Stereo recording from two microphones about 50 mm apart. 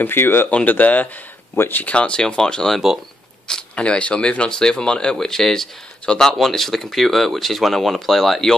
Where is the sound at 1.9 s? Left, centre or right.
Left.